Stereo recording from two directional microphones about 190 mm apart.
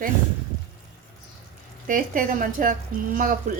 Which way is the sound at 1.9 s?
45° right (ahead or behind).